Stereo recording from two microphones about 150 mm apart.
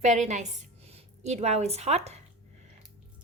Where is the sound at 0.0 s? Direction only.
50° right (ahead or behind).